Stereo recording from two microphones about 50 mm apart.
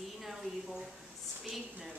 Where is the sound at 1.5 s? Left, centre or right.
Centre.